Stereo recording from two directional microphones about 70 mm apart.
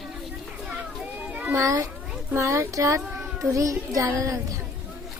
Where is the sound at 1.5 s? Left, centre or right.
Right.